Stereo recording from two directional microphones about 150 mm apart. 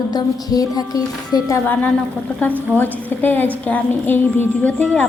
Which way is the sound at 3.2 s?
10° left (ahead or behind).